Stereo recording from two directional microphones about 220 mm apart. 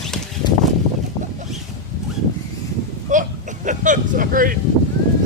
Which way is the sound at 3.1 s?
35° right (ahead or behind).